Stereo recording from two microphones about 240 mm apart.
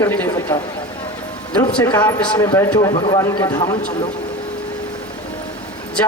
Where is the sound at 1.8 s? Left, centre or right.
Centre.